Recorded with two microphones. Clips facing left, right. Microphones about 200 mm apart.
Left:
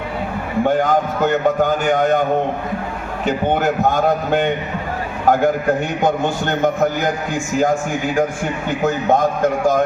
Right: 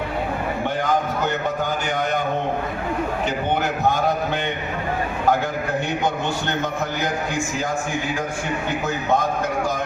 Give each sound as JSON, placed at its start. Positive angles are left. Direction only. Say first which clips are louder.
{"t": 0.6, "sound": "a man's voice", "louder": "left 8 dB", "side_deg": 50}
{"t": 3.2, "sound": "a man's voice", "louder": "left 9 dB", "side_deg": 50}
{"t": 6.0, "sound": "a man's voice", "louder": "left 5 dB", "side_deg": 50}
{"t": 9.0, "sound": "a man's voice", "louder": "left 5 dB", "side_deg": 50}